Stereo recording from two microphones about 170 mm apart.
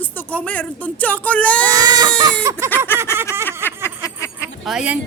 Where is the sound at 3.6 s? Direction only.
15° left (ahead or behind).